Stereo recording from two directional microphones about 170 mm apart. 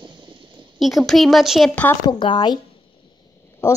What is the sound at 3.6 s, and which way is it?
Speech, 15° left (ahead or behind).